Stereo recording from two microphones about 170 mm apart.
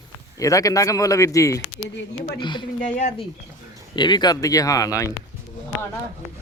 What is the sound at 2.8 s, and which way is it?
Speech, 45° left (ahead or behind).